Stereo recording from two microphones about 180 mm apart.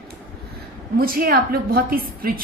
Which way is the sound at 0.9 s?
55° right (ahead or behind).